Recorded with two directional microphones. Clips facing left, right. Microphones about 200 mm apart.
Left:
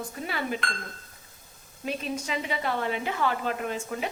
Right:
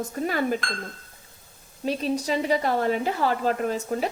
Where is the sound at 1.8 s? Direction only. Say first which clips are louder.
Right 6 dB; 35° right (ahead or behind).